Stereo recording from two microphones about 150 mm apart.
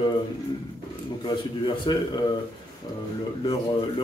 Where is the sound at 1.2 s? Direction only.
30° left (ahead or behind).